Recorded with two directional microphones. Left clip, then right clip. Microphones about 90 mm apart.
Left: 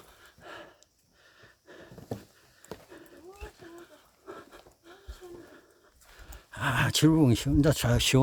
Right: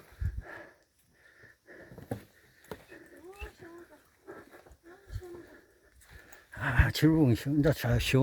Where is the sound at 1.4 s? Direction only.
25° left (ahead or behind).